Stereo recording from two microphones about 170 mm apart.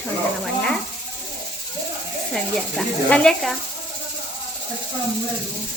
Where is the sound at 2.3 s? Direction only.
5° left (ahead or behind).